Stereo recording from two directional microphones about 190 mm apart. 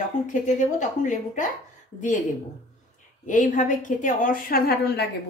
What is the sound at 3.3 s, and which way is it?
A woman's voice, 45° left (ahead or behind).